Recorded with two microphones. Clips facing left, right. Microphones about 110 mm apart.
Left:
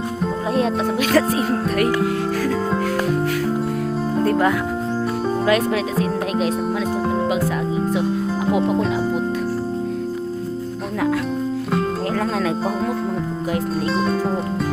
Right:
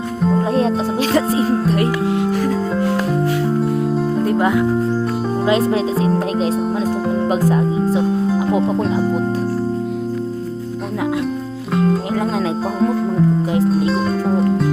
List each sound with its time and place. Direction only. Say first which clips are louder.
0.5 s music: right 2 dB; 30° right (ahead or behind)
4.2 s music: left 1 dB; 15° right (ahead or behind)
5.5 s speech: right 4 dB; 30° right (ahead or behind)
11.7 s music: right 7 dB; centre (ahead or behind)
13.7 s music: right 4 dB; centre (ahead or behind)